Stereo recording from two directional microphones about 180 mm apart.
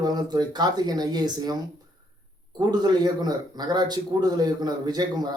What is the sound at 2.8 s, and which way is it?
Speech, 20° right (ahead or behind).